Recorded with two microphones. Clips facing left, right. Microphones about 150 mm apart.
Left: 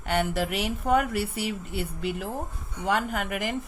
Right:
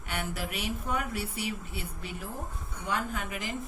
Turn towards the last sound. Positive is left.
turn(degrees=70)  # may be behind; listen again after turning